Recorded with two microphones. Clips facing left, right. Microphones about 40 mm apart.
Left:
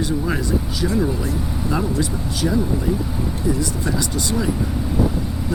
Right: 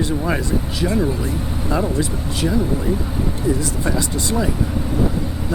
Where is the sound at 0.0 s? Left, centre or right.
Centre.